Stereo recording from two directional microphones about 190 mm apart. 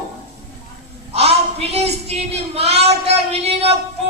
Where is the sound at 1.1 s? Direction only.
35° right (ahead or behind).